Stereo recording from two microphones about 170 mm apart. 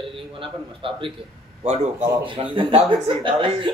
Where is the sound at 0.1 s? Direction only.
30° right (ahead or behind).